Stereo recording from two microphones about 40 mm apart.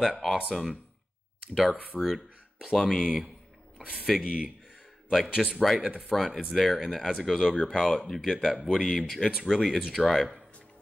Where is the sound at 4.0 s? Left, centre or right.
Centre.